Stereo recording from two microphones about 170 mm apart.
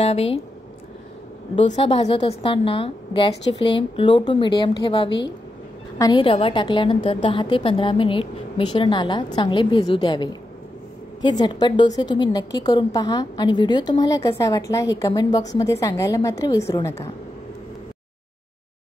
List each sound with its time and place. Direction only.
0.0 s speech: 35° left (ahead or behind)
1.7 s a woman's voice: 35° left (ahead or behind)
6.2 s a woman's voice: 30° left (ahead or behind)